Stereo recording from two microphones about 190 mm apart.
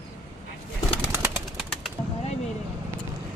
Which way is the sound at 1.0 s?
15° right (ahead or behind).